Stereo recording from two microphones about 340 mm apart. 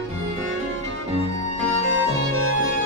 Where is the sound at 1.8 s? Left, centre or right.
Right.